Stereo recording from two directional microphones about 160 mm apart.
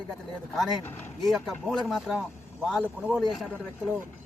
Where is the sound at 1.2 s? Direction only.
Centre (ahead or behind).